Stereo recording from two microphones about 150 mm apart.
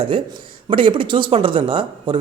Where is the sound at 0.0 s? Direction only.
35° right (ahead or behind).